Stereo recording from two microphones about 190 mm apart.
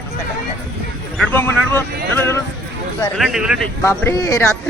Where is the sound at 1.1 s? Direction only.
10° left (ahead or behind).